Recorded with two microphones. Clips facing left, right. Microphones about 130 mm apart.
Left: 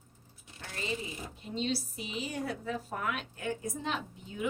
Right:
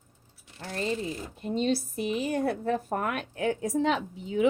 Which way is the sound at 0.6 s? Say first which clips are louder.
Right 7 dB; 45° right (ahead or behind).